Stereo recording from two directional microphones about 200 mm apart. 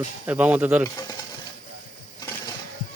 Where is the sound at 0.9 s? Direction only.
20° left (ahead or behind).